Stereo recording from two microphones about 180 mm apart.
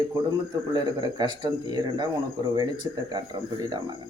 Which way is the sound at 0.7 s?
20° right (ahead or behind).